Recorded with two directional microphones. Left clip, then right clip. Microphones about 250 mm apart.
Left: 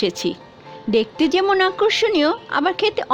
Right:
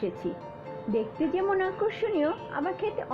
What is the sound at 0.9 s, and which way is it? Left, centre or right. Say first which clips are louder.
A woman's voice: left 11 dB; left.